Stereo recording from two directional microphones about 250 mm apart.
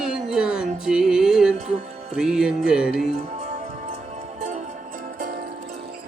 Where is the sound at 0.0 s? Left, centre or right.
Centre.